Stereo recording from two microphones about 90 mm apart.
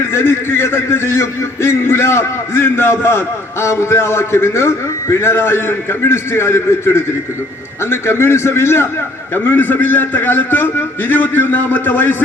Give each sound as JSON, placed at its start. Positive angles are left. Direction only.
{"t": 0.0, "sound": "a man's voice", "side_deg": 30}